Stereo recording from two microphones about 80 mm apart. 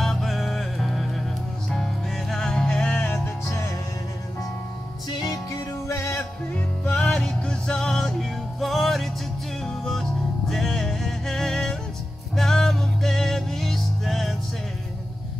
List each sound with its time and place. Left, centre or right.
0.0 s music: centre
3.4 s music: left
5.1 s music: left
6.5 s music: centre